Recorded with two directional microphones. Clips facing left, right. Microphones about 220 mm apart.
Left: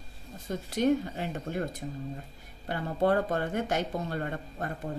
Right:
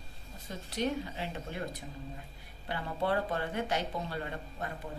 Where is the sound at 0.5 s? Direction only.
45° left (ahead or behind).